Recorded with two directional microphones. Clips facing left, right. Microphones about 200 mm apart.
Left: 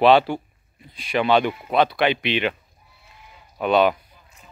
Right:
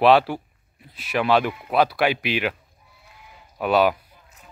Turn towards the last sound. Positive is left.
turn(degrees=-5)  # may be behind; listen again after turning